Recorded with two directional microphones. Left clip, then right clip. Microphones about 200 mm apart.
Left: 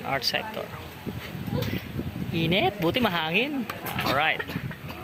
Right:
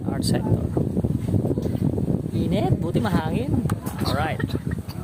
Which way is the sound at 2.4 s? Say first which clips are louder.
Left 3 dB; 15° right (ahead or behind).